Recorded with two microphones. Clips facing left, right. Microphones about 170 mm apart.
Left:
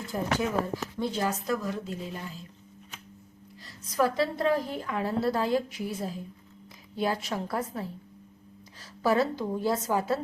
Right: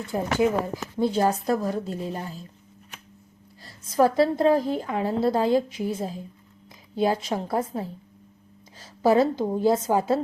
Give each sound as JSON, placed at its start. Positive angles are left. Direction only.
{"t": 0.1, "sound": "a woman's voice", "side_deg": -25}
{"t": 3.9, "sound": "a woman's voice", "side_deg": -35}
{"t": 8.8, "sound": "a sound", "side_deg": -25}
{"t": 9.4, "sound": "a woman's voice", "side_deg": -30}